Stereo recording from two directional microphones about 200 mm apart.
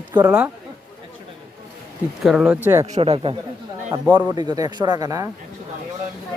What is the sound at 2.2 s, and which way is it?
Speech, centre (ahead or behind).